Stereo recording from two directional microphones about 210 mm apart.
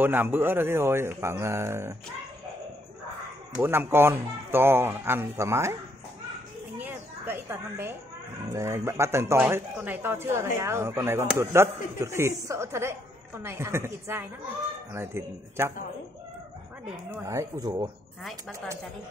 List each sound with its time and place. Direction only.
0.0 s speech: 10° right (ahead or behind)
3.5 s speech: 10° right (ahead or behind)
6.8 s a sound: 10° right (ahead or behind)
8.5 s speech: 10° right (ahead or behind)
17.2 s speech: 15° right (ahead or behind)